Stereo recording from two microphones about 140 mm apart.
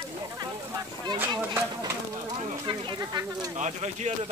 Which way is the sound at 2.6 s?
30° right (ahead or behind).